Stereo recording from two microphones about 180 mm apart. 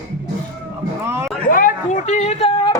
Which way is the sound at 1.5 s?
50° left (ahead or behind).